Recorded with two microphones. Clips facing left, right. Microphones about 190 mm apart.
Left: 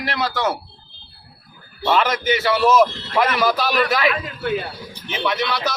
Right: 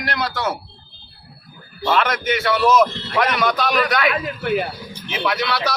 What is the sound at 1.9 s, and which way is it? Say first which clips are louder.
A man's voice: left 1 dB; centre (ahead or behind).